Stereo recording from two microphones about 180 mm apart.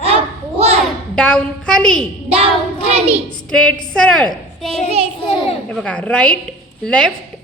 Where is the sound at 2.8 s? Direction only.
35° right (ahead or behind).